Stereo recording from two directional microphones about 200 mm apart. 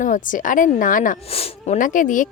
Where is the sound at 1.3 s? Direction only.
30° left (ahead or behind).